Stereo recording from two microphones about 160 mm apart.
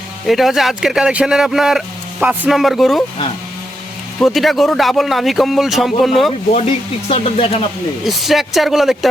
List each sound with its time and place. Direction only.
0.3 s speech: centre (ahead or behind)
4.2 s speech: centre (ahead or behind)
6.5 s speech: 45° left (ahead or behind)
8.0 s speech: centre (ahead or behind)